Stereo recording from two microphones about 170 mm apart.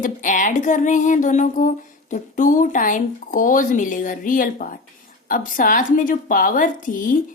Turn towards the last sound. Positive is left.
turn(degrees=50)  # may be behind; listen again after turning